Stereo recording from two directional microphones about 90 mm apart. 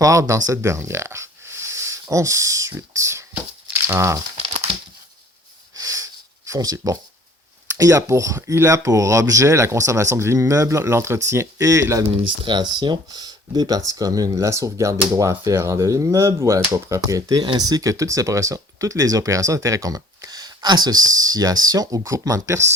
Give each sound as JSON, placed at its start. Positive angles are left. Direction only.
{"t": 0.0, "sound": "speech", "side_deg": -35}
{"t": 5.7, "sound": "a sound", "side_deg": -40}
{"t": 7.8, "sound": "speech", "side_deg": -35}
{"t": 12.5, "sound": "speech", "side_deg": -55}